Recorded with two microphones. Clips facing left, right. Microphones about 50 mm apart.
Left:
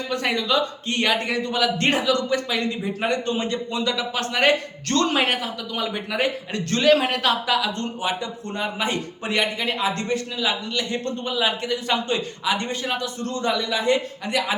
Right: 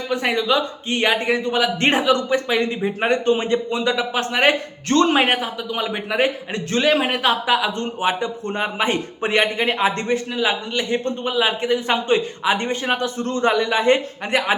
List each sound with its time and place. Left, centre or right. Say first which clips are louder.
0.1 s speech: right 3 dB; centre; by 14.5 s right